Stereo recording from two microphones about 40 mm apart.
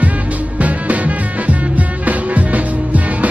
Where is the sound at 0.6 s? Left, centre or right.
Right.